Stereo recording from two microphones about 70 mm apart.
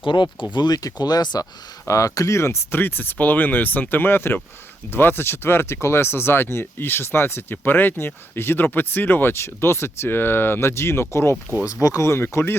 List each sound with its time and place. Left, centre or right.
0.5 s speech: left
1.9 s speech: left
11.7 s speech: left